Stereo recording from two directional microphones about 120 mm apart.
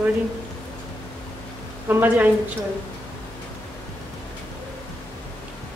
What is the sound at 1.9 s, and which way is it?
Speech, 15° right (ahead or behind).